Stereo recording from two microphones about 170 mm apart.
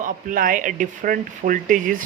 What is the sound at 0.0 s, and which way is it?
Speech, 55° right (ahead or behind).